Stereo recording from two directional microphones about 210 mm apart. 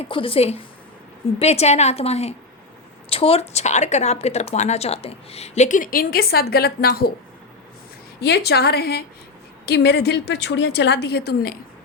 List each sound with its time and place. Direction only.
0.0 s a woman's voice: 25° left (ahead or behind); by 7.1 s 50° left (ahead or behind)
8.2 s a woman's voice: 50° left (ahead or behind)